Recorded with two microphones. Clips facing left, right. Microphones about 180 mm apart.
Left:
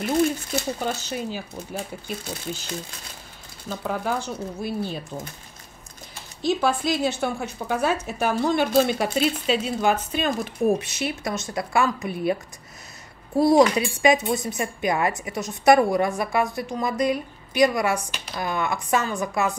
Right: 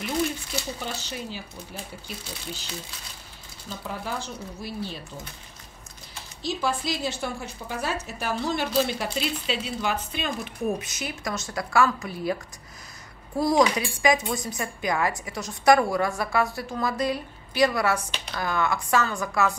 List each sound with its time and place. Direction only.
0.0 s a woman's voice: 50° left (ahead or behind)
6.4 s a woman's voice: 55° left (ahead or behind)
10.9 s a woman's voice: 25° left (ahead or behind)
13.4 s a woman's voice: 25° left (ahead or behind)